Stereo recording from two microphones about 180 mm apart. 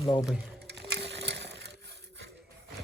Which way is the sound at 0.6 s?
70° right (ahead or behind).